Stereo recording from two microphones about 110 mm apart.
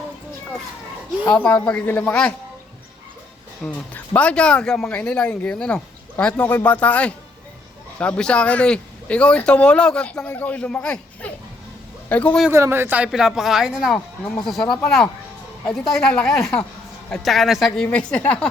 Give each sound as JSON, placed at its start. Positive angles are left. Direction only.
{"t": 1.3, "sound": "a man's voice", "side_deg": 10}
{"t": 3.6, "sound": "a man's voice", "side_deg": 15}
{"t": 12.5, "sound": "speech", "side_deg": -25}
{"t": 13.1, "sound": "speech", "side_deg": -5}
{"t": 15.9, "sound": "a man's voice", "side_deg": 5}